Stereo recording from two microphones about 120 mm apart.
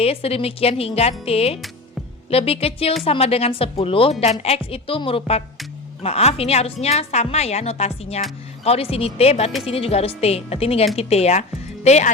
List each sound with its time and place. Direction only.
0.0 s a woman's voice: 55° left (ahead or behind)